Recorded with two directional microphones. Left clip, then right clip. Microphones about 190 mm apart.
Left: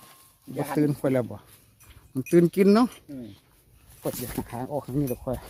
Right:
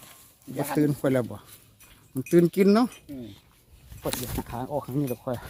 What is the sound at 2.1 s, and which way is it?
Speech, 5° left (ahead or behind).